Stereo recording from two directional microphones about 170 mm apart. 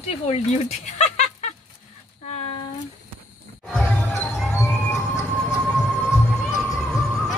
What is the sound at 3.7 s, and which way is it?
Basketball bounce, centre (ahead or behind).